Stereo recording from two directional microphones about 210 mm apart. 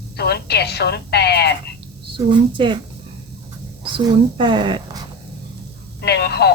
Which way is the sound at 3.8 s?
20° right (ahead or behind).